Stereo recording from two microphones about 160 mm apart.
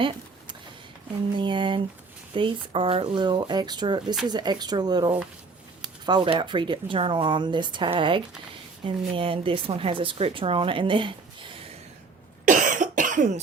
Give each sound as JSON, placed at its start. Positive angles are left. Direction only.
{"t": 1.4, "sound": "a woman's voice", "side_deg": -30}
{"t": 12.5, "sound": "cough", "side_deg": -55}